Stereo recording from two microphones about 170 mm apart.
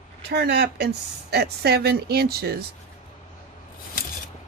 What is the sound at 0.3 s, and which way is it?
Speech, 85° right.